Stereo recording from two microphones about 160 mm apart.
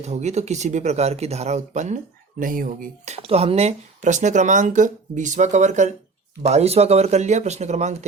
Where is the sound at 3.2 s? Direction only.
40° right (ahead or behind).